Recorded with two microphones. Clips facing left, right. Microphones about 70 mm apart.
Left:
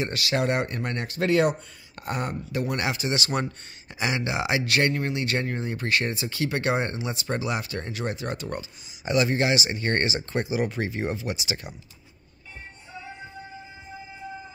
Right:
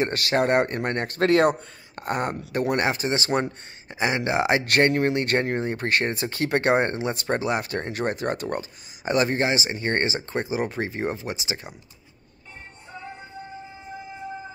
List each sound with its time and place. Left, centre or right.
0.0 s speech: right